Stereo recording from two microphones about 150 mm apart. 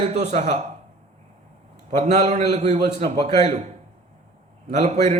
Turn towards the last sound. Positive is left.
turn(degrees=-50)  # may be behind; listen again after turning